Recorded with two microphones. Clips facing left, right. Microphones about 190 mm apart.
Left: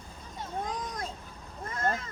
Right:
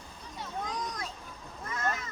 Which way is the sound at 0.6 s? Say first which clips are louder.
Left 1 dB; 50° left (ahead or behind).